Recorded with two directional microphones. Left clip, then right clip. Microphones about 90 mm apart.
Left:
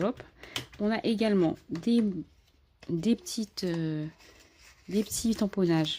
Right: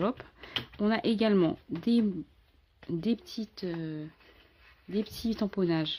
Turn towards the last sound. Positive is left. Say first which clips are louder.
# left 2 dB
turn(degrees=30)  # may be behind; listen again after turning